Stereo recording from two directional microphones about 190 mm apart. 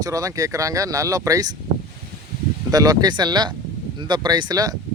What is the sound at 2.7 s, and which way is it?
Speech, 20° right (ahead or behind).